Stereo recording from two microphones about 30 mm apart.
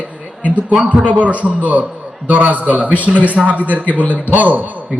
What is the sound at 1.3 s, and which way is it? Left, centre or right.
A man's voice, right.